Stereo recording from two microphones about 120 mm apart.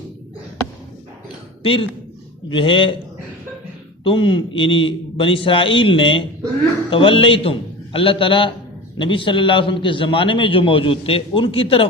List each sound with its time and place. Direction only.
1.6 s a man's voice: 50° left (ahead or behind)
4.0 s a man's voice: 45° left (ahead or behind)